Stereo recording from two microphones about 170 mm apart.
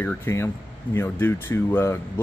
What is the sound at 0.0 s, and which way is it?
A man's voice, 15° left (ahead or behind).